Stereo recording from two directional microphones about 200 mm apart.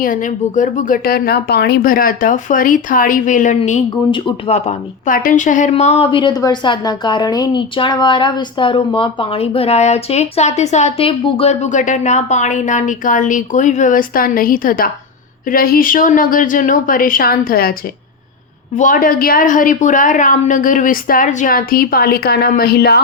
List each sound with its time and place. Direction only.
0.0 s a woman's voice: 40° left (ahead or behind)
18.8 s a woman's voice: 45° left (ahead or behind)